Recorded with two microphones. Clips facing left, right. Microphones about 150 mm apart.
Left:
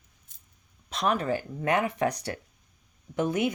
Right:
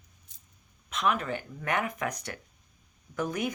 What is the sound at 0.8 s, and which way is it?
Speech, 35° left (ahead or behind).